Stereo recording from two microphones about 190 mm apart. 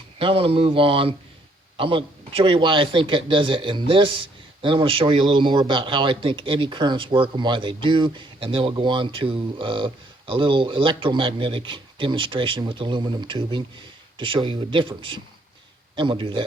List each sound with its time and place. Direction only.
0.2 s a man's voice: 30° right (ahead or behind)